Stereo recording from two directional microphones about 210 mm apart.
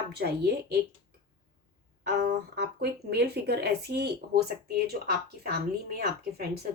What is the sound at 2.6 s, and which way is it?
Speech, 50° right (ahead or behind).